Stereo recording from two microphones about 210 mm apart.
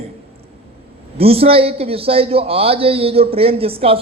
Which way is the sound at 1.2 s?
30° right (ahead or behind).